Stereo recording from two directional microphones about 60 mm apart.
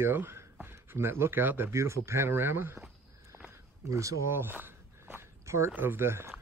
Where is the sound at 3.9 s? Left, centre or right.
Right.